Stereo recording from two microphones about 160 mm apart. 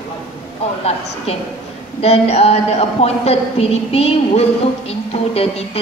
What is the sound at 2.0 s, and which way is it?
Speech, 40° left (ahead or behind).